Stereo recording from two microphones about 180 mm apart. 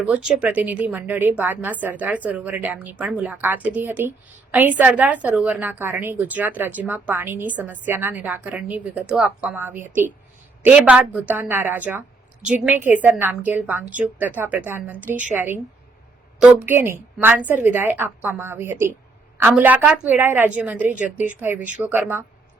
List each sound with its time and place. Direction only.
0.0 s a woman's voice: 5° right (ahead or behind)